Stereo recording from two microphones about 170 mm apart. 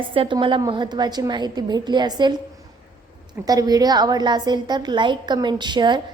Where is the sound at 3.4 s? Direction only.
20° right (ahead or behind).